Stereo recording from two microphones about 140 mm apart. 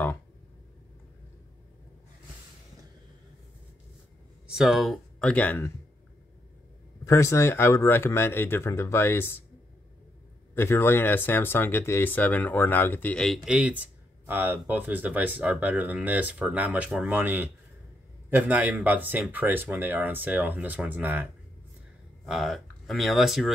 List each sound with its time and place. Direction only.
4.5 s speech: 5° right (ahead or behind)
7.1 s speech: 20° left (ahead or behind)
10.5 s speech: 15° left (ahead or behind); by 21.3 s 10° right (ahead or behind)
22.2 s speech: centre (ahead or behind)